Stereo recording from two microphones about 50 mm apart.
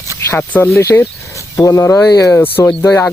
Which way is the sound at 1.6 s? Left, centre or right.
Left.